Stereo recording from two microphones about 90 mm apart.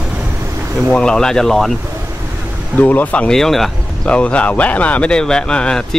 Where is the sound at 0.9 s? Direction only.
10° left (ahead or behind).